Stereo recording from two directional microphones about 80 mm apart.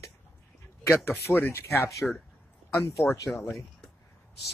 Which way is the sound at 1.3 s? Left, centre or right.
Left.